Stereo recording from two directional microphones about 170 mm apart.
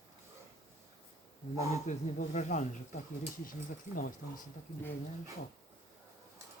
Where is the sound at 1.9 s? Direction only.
45° left (ahead or behind).